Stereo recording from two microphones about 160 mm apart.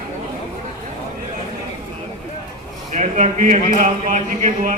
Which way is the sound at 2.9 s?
50° right (ahead or behind).